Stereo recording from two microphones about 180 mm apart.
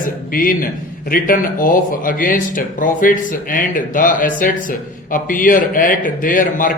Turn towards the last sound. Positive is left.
turn(degrees=50)  # may be behind; listen again after turning